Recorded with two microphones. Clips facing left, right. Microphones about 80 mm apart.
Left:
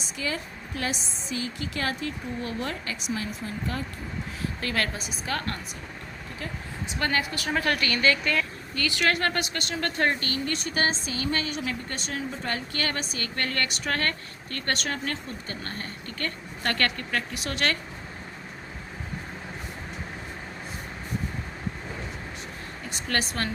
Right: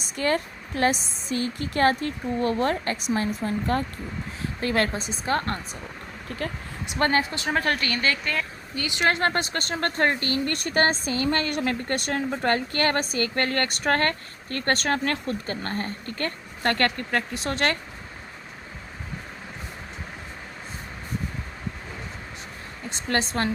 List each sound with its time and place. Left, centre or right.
0.2 s a woman's voice: right
4.6 s a woman's voice: right
6.4 s speech: right
7.0 s a woman's voice: right
10.4 s a woman's voice: right
15.4 s speech: right
22.9 s a woman's voice: right